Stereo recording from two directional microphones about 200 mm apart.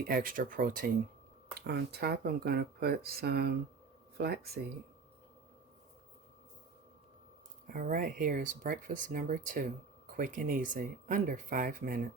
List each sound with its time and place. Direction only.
0.0 s speech: 45° right (ahead or behind)
1.5 s speech: 55° right (ahead or behind)
7.7 s speech: 45° right (ahead or behind)